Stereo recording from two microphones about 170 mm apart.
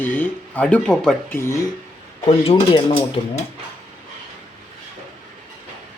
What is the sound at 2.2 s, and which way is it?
Speech, 35° left (ahead or behind).